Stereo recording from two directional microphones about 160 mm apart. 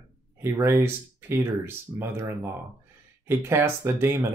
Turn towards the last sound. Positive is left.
turn(degrees=-15)  # may be behind; listen again after turning